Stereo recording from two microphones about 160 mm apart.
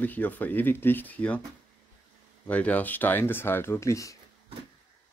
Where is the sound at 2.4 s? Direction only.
10° left (ahead or behind).